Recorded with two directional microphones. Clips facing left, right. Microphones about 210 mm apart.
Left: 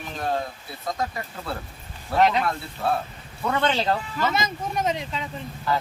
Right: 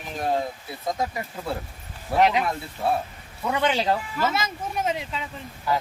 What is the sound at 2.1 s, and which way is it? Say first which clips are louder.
Speech: even; 10° right (ahead or behind).